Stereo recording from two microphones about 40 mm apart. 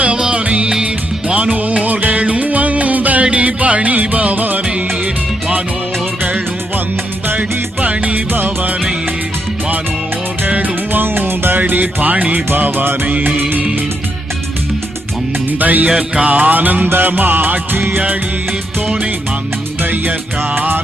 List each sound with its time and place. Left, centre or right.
0.2 s music: right
7.3 s music: right
8.3 s music: right
10.6 s music: right
13.1 s music: right
15.5 s music: right
15.9 s music: right
16.2 s music: right
20.6 s music: right